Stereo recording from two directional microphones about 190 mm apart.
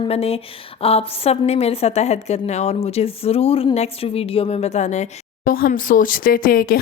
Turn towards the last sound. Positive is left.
turn(degrees=50)  # may be behind; listen again after turning